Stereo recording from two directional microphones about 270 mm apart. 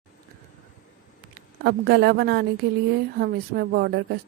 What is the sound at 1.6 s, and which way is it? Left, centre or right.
Speech, right.